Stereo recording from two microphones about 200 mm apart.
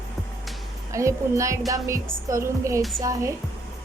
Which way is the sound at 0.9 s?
15° right (ahead or behind).